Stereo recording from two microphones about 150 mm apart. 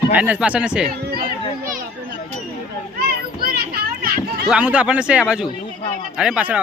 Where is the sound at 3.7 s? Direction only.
90° right.